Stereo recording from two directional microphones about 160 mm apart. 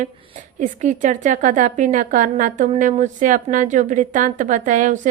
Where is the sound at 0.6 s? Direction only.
50° right (ahead or behind).